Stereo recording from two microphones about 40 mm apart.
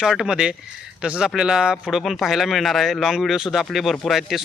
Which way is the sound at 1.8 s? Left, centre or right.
Centre.